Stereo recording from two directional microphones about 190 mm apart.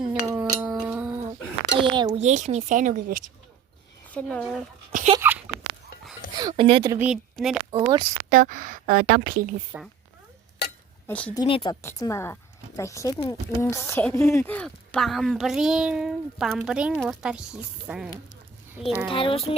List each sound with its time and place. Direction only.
0.1 s chink: 10° right (ahead or behind)
1.8 s speech: 25° right (ahead or behind)
2.2 s a woman's voice: 40° right (ahead or behind)
4.1 s a woman's voice: 5° left (ahead or behind)
4.9 s speech: 45° right (ahead or behind)
6.3 s speech: 25° right (ahead or behind)
6.9 s a woman's voice: 10° right (ahead or behind)
7.7 s a woman's voice: 25° right (ahead or behind)
8.3 s speech: 45° right (ahead or behind)
9.7 s a woman's voice: 5° right (ahead or behind)
11.0 s a woman's voice: 10° left (ahead or behind)
11.3 s a child's voice: 25° left (ahead or behind)
11.8 s a woman's voice: 15° left (ahead or behind); by 18.9 s 5° right (ahead or behind)
19.0 s a child's voice: 30° left (ahead or behind)